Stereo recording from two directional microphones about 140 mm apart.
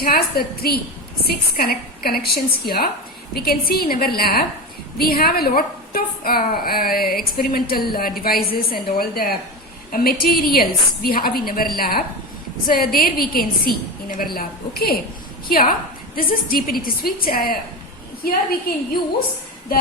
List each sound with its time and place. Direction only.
0.0 s a woman's voice: 90° left